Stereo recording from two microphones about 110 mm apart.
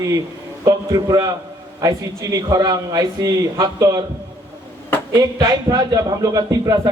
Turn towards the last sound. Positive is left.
turn(degrees=-30)  # may be behind; listen again after turning